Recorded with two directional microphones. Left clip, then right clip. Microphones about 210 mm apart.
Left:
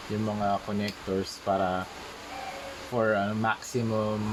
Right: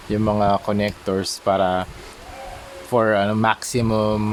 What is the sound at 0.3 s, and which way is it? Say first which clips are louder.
Speech: right 11 dB; 40° right (ahead or behind).